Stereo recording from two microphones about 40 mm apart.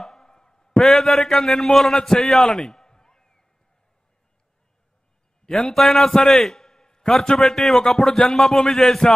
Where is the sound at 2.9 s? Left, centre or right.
Centre.